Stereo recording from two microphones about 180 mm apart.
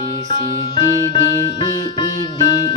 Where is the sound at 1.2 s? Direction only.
20° right (ahead or behind).